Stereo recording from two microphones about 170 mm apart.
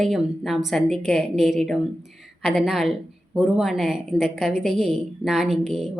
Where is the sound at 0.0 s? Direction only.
Centre (ahead or behind).